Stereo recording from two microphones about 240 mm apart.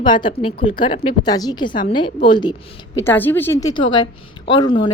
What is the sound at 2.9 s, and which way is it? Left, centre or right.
A woman's voice, centre.